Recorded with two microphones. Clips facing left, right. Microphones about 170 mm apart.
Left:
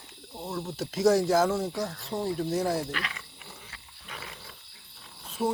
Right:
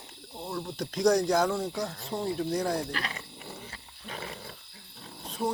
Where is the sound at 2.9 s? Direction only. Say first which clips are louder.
Right 1 dB; 35° right (ahead or behind).